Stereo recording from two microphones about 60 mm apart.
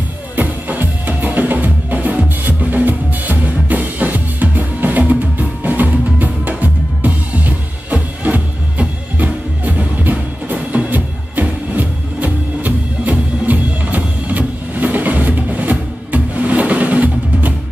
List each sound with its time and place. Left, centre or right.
0.4 s music: right
5.6 s drum: right
13.5 s music: right